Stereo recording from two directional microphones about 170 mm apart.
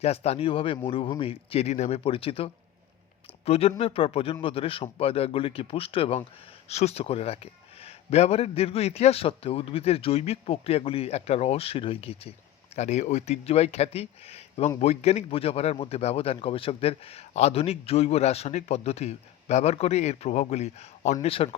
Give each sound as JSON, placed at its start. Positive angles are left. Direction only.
{"t": 0.0, "sound": "speech", "side_deg": 40}